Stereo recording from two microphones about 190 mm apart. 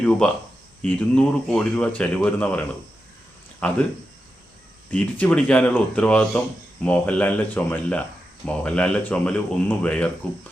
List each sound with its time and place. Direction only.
0.0 s a man's voice: 5° left (ahead or behind)
4.9 s speech: 5° left (ahead or behind)